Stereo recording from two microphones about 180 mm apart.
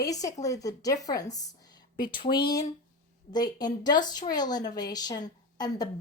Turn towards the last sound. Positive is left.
turn(degrees=20)  # may be behind; listen again after turning